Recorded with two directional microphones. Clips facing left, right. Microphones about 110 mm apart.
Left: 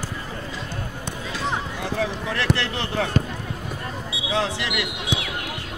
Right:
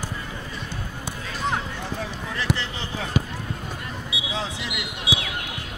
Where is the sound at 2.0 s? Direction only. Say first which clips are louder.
Left 5 dB; 70° left (ahead or behind).